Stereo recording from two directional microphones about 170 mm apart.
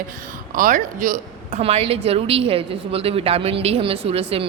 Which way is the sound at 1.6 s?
35° right (ahead or behind).